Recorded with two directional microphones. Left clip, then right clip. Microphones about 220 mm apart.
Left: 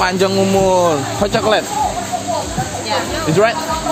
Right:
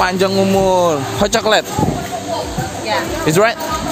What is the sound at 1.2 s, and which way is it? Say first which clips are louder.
Speech: right 2 dB; 30° right (ahead or behind).